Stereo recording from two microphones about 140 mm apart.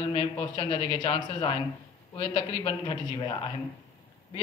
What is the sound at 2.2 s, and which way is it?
Speech, 40° left (ahead or behind).